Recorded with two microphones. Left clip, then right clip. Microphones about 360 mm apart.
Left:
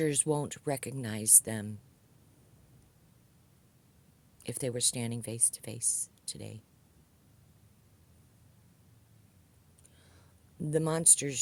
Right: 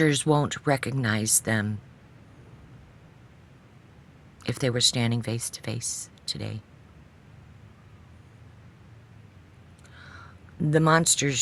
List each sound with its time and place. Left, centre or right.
0.0 s speech: left
4.4 s speech: left
9.9 s a sound: left
10.7 s speech: left